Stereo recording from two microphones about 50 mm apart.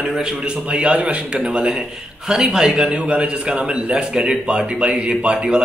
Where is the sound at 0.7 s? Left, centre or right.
Right.